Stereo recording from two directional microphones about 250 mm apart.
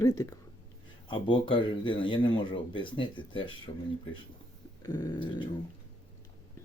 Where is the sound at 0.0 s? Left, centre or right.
Centre.